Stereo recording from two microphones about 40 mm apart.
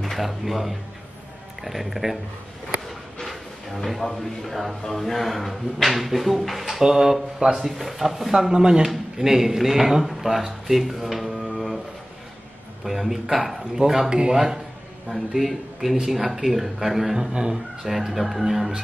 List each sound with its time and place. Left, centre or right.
0.0 s speech: centre
12.8 s speech: centre
15.0 s speech: centre
17.8 s speech: centre